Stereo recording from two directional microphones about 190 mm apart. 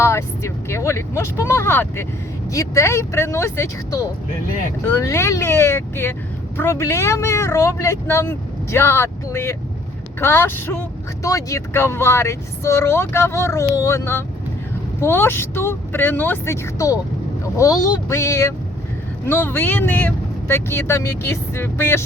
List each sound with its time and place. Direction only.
0.0 s speech: 15° left (ahead or behind)